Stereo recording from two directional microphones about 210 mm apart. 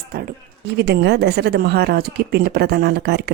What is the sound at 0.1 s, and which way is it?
A woman's voice, 45° right (ahead or behind).